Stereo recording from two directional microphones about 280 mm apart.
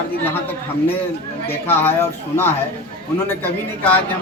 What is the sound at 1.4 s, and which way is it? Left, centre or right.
Speech, centre.